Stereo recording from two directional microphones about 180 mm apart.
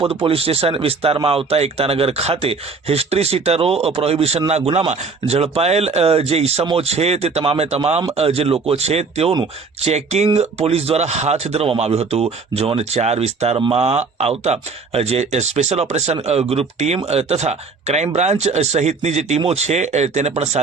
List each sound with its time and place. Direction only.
0.0 s speech: 30° right (ahead or behind)